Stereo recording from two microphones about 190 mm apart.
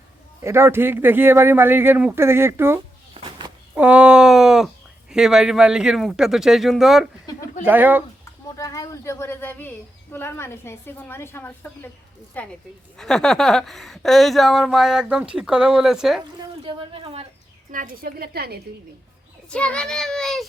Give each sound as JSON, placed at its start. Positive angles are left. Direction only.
{"t": 0.4, "sound": "speech", "side_deg": -15}
{"t": 3.2, "sound": "a sound", "side_deg": -25}
{"t": 3.8, "sound": "a sound", "side_deg": -5}
{"t": 5.1, "sound": "speech", "side_deg": -5}
{"t": 8.5, "sound": "a woman's voice", "side_deg": 20}
{"t": 16.6, "sound": "a woman's voice", "side_deg": -30}
{"t": 17.7, "sound": "a woman's voice", "side_deg": -45}
{"t": 19.5, "sound": "speech", "side_deg": 5}